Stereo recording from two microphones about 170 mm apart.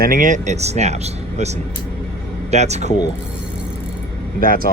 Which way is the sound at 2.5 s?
40° right (ahead or behind).